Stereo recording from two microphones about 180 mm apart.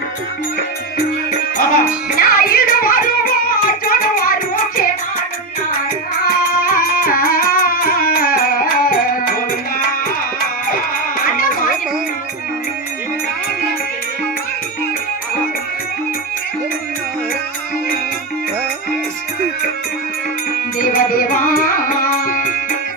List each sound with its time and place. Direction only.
2.0 s music: 55° left (ahead or behind)
6.5 s music: 55° left (ahead or behind)
11.3 s music: 55° left (ahead or behind)
20.7 s music: 50° left (ahead or behind)